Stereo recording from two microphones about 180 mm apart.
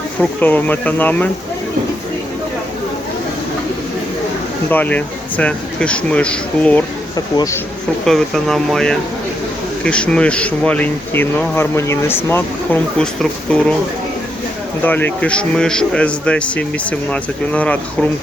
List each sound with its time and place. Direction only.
0.2 s speech: 10° left (ahead or behind)
4.7 s speech: 10° left (ahead or behind)
7.3 s speech: 20° left (ahead or behind)
8.0 s speech: centre (ahead or behind)
14.8 s speech: 10° left (ahead or behind)